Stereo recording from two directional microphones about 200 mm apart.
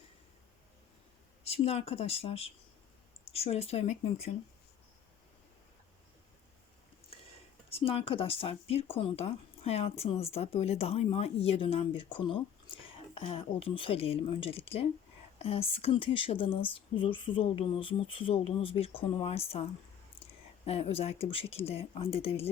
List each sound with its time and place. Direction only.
1.5 s speech: 30° left (ahead or behind)
7.7 s speech: 30° left (ahead or behind)
20.7 s speech: 30° left (ahead or behind)